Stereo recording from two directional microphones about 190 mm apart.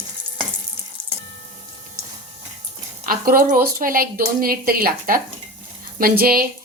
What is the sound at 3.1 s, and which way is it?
A woman's voice, 50° right (ahead or behind).